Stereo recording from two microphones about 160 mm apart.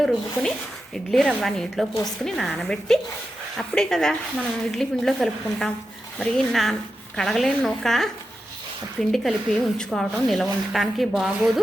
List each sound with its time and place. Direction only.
0.9 s speech: 5° left (ahead or behind)